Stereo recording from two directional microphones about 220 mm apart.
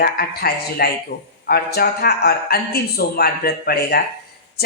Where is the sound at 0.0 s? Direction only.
45° left (ahead or behind).